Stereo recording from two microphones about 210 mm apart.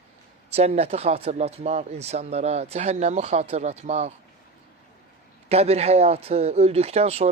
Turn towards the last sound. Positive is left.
turn(degrees=-30)  # may be behind; listen again after turning